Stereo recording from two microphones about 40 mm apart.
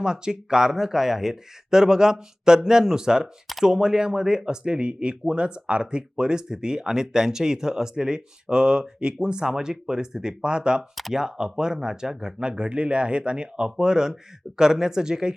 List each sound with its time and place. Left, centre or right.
0.0 s speech: centre